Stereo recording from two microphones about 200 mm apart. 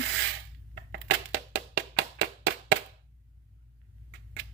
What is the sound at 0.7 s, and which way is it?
Crushing, 60° right (ahead or behind).